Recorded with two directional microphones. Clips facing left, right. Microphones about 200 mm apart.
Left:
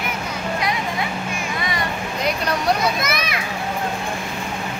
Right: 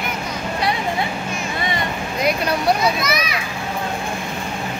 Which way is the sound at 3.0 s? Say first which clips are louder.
Right 2 dB; 55° left (ahead or behind).